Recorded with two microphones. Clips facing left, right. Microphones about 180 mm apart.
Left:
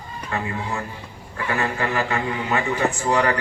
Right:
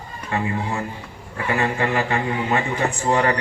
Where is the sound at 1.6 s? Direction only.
20° right (ahead or behind).